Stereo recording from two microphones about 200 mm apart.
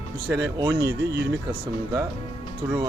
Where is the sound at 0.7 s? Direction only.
60° right (ahead or behind).